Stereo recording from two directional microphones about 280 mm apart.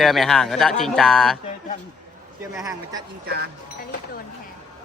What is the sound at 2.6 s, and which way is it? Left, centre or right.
Speech, centre.